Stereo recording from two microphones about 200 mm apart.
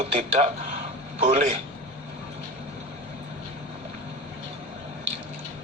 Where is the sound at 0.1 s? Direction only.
30° right (ahead or behind).